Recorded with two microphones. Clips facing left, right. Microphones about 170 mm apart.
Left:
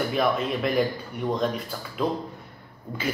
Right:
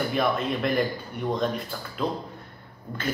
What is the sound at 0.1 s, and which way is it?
Speech, centre (ahead or behind).